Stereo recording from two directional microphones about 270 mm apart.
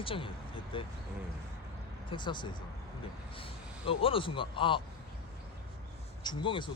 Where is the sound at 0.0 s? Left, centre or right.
Centre.